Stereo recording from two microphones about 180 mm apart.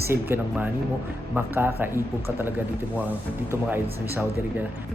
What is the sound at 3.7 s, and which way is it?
Speech, 10° right (ahead or behind).